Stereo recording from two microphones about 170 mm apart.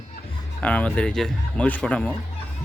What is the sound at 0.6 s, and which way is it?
Speech, 10° left (ahead or behind).